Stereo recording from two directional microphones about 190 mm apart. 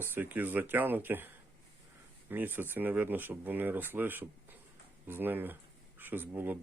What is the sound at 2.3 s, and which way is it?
Speech, 10° right (ahead or behind).